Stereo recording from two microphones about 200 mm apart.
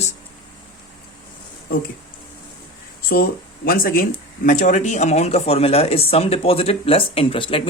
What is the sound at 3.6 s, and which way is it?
Speech, 45° left (ahead or behind).